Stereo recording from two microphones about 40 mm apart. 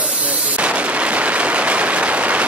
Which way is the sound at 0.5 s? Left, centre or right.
Right.